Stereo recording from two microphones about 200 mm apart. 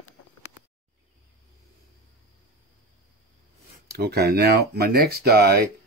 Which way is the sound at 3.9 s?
50° right (ahead or behind).